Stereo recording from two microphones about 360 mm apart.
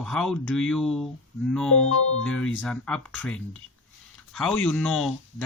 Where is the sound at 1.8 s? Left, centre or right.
Left.